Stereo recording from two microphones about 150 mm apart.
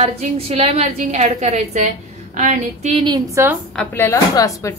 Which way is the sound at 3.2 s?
20° right (ahead or behind).